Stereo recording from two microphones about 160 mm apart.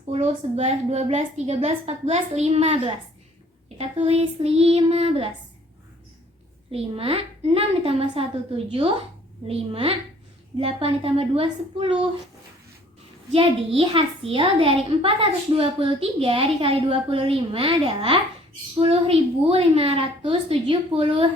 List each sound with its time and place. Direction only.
0.1 s a child's voice: 40° right (ahead or behind)
6.7 s a child's voice: 35° right (ahead or behind)
13.3 s a child's voice: 35° right (ahead or behind)